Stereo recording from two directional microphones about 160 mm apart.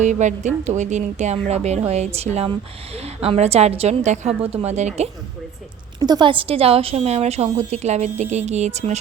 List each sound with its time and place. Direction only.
0.0 s a woman's voice: 50° right (ahead or behind)
6.0 s a woman's voice: 25° right (ahead or behind); by 9.0 s 45° right (ahead or behind)